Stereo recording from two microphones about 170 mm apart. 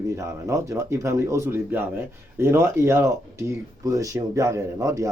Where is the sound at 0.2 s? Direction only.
15° right (ahead or behind).